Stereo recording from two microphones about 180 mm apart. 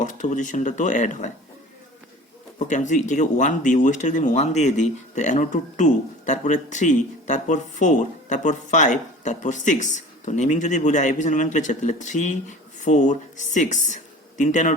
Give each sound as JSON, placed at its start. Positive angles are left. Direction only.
{"t": 0.0, "sound": "speech", "side_deg": 45}
{"t": 2.6, "sound": "speech", "side_deg": 45}